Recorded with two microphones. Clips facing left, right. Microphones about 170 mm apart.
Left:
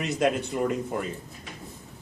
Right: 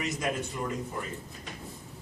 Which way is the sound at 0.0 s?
65° left (ahead or behind).